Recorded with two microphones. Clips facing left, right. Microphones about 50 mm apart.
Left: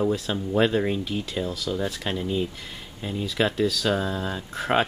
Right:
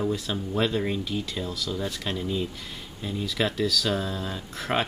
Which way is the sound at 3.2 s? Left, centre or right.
Centre.